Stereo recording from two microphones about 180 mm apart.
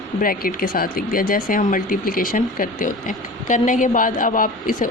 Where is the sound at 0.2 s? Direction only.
50° left (ahead or behind).